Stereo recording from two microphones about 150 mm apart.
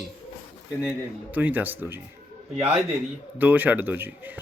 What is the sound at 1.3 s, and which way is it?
Speech, 10° right (ahead or behind).